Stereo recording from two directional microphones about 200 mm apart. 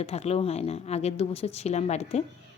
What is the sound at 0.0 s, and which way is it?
A woman's voice, 30° left (ahead or behind).